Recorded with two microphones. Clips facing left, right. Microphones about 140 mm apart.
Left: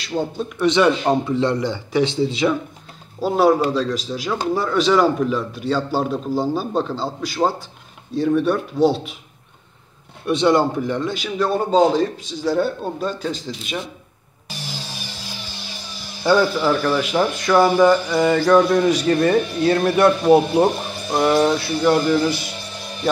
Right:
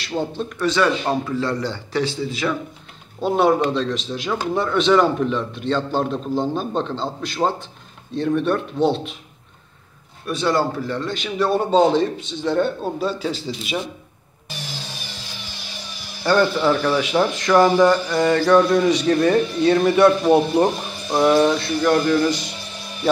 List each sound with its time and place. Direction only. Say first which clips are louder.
0.1 s a man's voice: left 1 dB; 10° left (ahead or behind)
0.7 s speech: left 3 dB; 20° left (ahead or behind)
3.2 s speech: left 1 dB; centre (ahead or behind)
10.2 s a man's voice: left 4 dB; 25° left (ahead or behind)
11.3 s speech: even; centre (ahead or behind)
16.3 s speech: left 1 dB; 5° left (ahead or behind)